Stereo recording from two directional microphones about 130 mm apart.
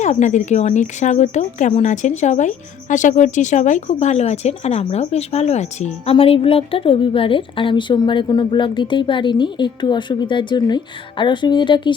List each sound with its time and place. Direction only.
0.0 s speech: 65° left (ahead or behind); by 11.9 s 35° left (ahead or behind)